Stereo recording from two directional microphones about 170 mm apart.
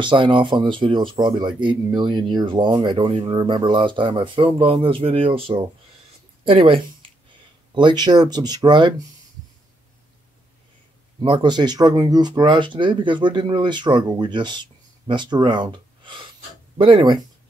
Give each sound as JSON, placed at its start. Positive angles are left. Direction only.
{"t": 0.0, "sound": "speech", "side_deg": -30}
{"t": 6.4, "sound": "speech", "side_deg": -30}
{"t": 11.1, "sound": "speech", "side_deg": -30}